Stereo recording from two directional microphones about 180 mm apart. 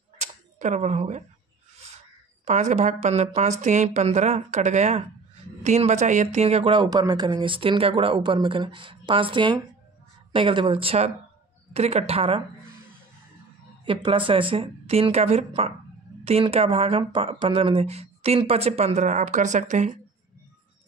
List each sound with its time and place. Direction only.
0.2 s camera: 40° right (ahead or behind)
2.4 s speech: 40° right (ahead or behind)
13.8 s speech: 30° right (ahead or behind)